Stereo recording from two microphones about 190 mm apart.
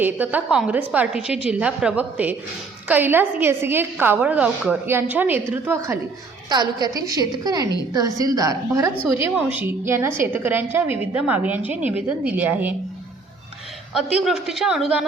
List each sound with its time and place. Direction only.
0.0 s a woman's voice: 10° right (ahead or behind)
13.9 s a woman's voice: 5° right (ahead or behind)